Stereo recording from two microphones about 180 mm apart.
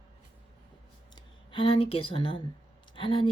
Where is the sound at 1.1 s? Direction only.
30° left (ahead or behind).